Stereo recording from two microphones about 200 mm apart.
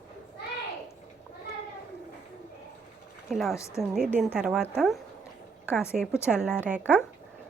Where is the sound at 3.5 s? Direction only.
15° left (ahead or behind).